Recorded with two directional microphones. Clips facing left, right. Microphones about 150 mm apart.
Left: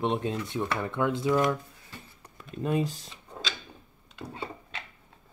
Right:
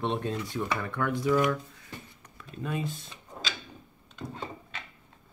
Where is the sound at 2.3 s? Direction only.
35° left (ahead or behind).